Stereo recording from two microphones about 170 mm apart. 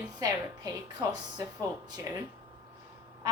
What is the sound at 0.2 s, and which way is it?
Speech, 20° right (ahead or behind).